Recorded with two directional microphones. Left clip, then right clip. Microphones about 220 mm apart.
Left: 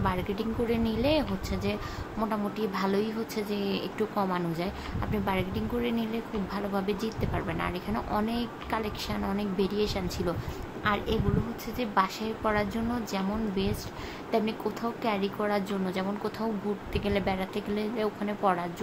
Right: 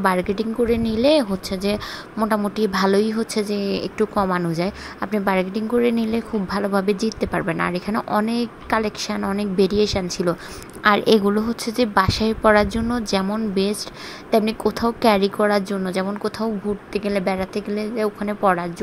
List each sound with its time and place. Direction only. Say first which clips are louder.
0.0 s a woman's voice: right 10 dB; 35° right (ahead or behind)